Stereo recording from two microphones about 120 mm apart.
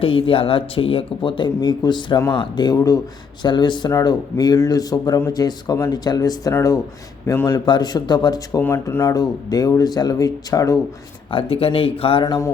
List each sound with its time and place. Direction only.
0.0 s speech: 50° left (ahead or behind); by 7.7 s 25° left (ahead or behind)
7.7 s speech: 35° left (ahead or behind)
8.6 s speech: 20° left (ahead or behind)
9.1 s speech: 30° left (ahead or behind)
11.3 s speech: 50° left (ahead or behind)
12.2 s speech: 35° left (ahead or behind)